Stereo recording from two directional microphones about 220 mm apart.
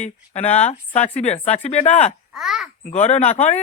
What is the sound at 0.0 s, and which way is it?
Speech, 30° left (ahead or behind).